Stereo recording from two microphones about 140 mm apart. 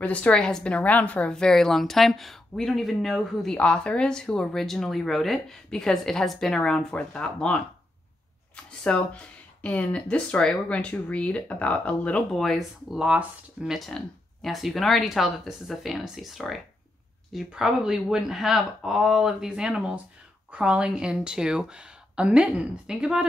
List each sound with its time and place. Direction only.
0.0 s speech: 10° left (ahead or behind)
8.8 s speech: 5° left (ahead or behind)